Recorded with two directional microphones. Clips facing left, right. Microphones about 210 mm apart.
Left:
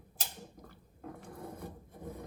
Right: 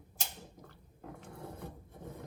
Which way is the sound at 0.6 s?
Centre (ahead or behind).